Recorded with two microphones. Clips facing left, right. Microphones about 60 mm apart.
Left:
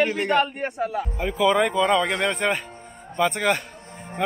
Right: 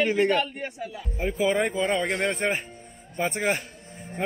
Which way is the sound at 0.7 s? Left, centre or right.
Left.